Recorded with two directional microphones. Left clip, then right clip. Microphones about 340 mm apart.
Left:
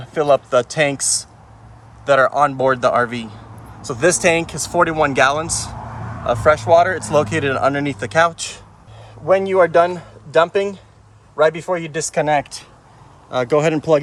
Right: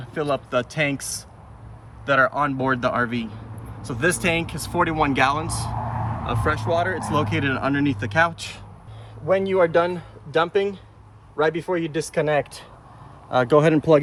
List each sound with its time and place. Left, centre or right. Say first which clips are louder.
0.0 s speech: left 10 dB; centre
9.2 s a man's voice: left 5 dB; left; by 12.5 s centre
13.6 s speech: left 2 dB; centre